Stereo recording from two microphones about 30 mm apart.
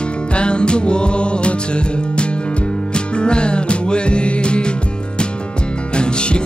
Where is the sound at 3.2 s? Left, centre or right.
Left.